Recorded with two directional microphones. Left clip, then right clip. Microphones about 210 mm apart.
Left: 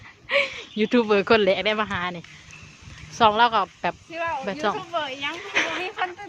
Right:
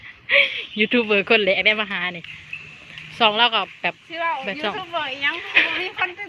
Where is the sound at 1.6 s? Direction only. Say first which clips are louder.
Right 4 dB; 15° left (ahead or behind).